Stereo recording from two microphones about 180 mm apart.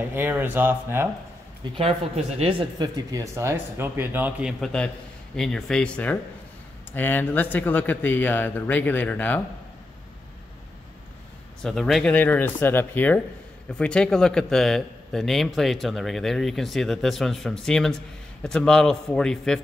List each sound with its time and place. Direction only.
0.1 s speech: 10° right (ahead or behind)
1.6 s speech: 30° right (ahead or behind)
3.1 s speech: 15° right (ahead or behind); by 9.4 s 10° left (ahead or behind)
11.6 s speech: centre (ahead or behind)